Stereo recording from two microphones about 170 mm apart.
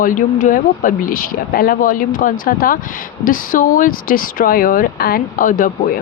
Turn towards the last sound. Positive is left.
turn(degrees=55)  # may be behind; listen again after turning